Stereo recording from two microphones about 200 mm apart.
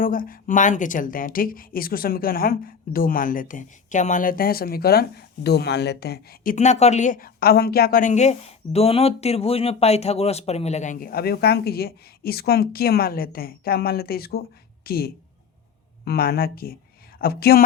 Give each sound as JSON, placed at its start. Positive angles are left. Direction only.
{"t": 0.0, "sound": "a woman's voice", "side_deg": 45}